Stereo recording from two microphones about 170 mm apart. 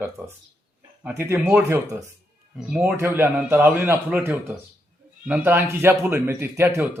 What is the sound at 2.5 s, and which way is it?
A man's voice, 5° right (ahead or behind).